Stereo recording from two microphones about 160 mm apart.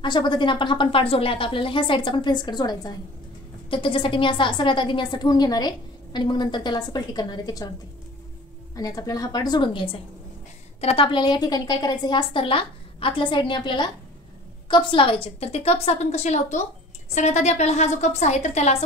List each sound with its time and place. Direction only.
0.0 s a woman's voice: 30° left (ahead or behind)
8.7 s a woman's voice: 20° left (ahead or behind); by 18.9 s 40° left (ahead or behind)